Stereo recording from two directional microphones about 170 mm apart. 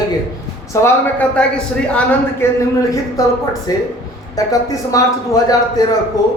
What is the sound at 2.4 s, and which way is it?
Speech, 15° left (ahead or behind).